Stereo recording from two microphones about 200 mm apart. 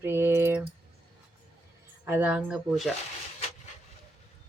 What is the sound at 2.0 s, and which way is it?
Speech, 10° right (ahead or behind).